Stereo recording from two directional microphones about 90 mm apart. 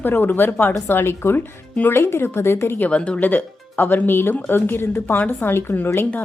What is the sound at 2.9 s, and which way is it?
Speech, 10° left (ahead or behind).